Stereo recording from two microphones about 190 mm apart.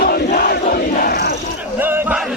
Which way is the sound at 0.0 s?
55° left (ahead or behind).